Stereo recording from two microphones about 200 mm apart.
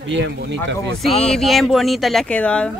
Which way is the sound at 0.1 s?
60° right (ahead or behind).